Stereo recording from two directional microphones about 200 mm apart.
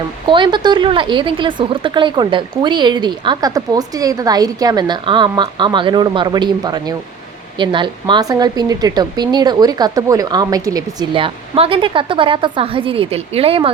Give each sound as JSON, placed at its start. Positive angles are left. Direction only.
{"t": 0.3, "sound": "a woman's voice", "side_deg": -25}